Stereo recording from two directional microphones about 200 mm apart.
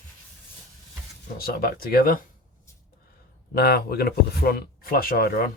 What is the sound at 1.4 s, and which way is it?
Speech, 50° left (ahead or behind).